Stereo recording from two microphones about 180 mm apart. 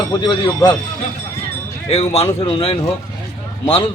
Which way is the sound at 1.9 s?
35° left (ahead or behind).